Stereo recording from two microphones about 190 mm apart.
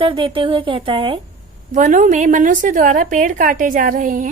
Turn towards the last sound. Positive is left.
turn(degrees=-45)  # may be behind; listen again after turning